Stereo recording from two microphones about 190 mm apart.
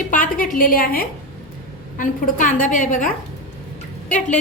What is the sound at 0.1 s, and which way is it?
A woman's voice, 45° left (ahead or behind).